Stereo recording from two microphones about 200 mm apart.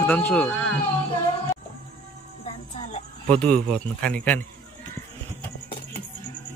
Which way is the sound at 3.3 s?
5° left (ahead or behind).